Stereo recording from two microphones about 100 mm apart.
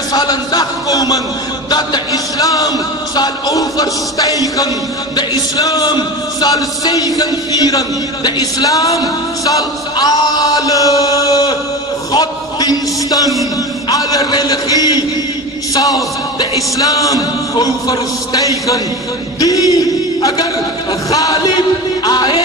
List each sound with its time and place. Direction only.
0.1 s speech: 45° left (ahead or behind)
12.1 s a sound: 40° left (ahead or behind)
13.8 s speech: 40° left (ahead or behind)
21.1 s music: 35° left (ahead or behind)